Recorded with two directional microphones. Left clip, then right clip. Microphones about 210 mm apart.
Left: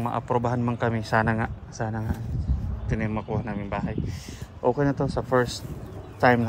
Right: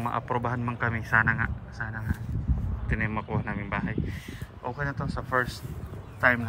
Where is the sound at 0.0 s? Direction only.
15° left (ahead or behind).